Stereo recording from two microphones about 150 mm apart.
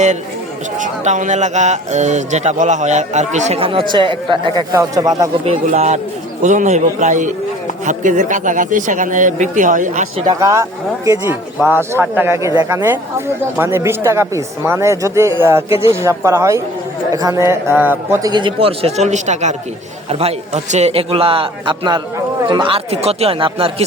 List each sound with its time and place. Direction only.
0.8 s a man's voice: 55° right (ahead or behind)
3.6 s a man's voice: 35° right (ahead or behind)
5.6 s a man's voice: 50° right (ahead or behind)
10.2 s speech: 20° right (ahead or behind)
18.2 s a man's voice: 30° right (ahead or behind)